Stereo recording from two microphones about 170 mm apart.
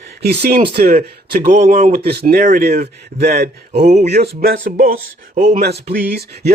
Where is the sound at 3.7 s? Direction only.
40° right (ahead or behind).